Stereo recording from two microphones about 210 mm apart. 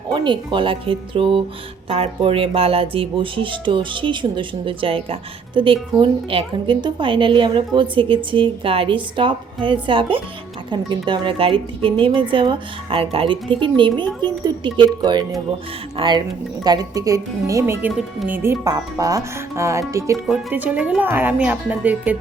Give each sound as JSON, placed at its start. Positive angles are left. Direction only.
{"t": 0.1, "sound": "a woman's voice", "side_deg": -25}